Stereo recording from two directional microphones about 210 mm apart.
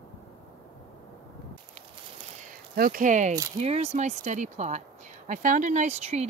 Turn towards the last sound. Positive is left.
turn(degrees=-30)  # may be behind; listen again after turning